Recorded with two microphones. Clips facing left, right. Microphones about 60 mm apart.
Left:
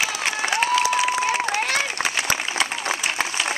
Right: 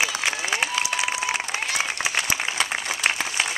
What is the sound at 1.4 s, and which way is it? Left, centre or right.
Applause, left.